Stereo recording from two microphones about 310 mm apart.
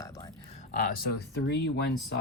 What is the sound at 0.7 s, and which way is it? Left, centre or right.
Speech, left.